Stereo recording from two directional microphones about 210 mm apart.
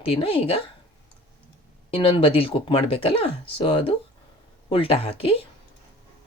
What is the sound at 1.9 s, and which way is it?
Speech, 25° left (ahead or behind).